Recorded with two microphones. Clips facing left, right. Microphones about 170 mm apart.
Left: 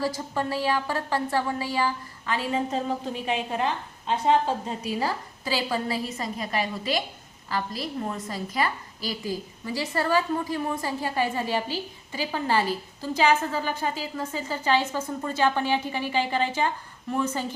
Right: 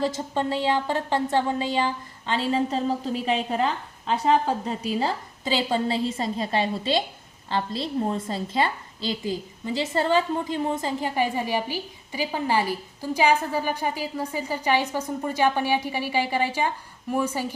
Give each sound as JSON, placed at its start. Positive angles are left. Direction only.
{"t": 0.0, "sound": "speech", "side_deg": -25}
{"t": 4.8, "sound": "a woman's voice", "side_deg": -25}